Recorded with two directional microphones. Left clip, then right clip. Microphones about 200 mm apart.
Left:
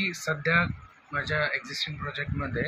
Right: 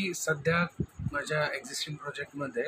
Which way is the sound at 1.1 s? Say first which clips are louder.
Left 3 dB; 15° right (ahead or behind).